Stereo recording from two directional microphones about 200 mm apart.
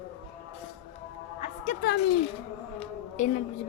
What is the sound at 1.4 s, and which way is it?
Speech, 40° left (ahead or behind).